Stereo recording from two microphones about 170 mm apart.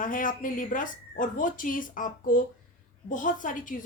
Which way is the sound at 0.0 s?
50° left (ahead or behind).